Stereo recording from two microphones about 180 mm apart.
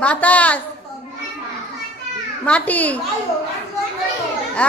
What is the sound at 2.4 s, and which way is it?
Speech, 10° left (ahead or behind).